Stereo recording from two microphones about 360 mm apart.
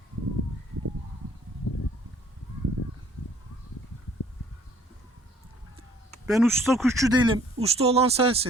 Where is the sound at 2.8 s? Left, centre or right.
Left.